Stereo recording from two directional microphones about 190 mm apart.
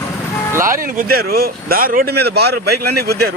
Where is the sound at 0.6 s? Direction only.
15° right (ahead or behind).